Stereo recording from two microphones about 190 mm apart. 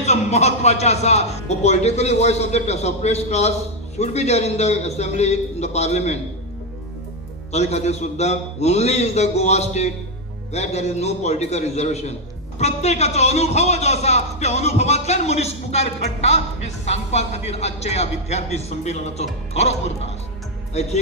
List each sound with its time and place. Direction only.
0.0 s speech: 35° left (ahead or behind)
7.5 s speech: 35° left (ahead or behind)